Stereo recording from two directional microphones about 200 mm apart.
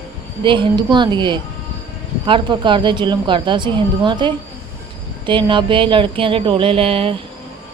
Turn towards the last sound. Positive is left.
turn(degrees=-25)  # may be behind; listen again after turning